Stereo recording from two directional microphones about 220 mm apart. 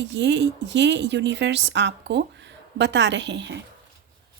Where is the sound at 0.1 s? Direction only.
50° right (ahead or behind).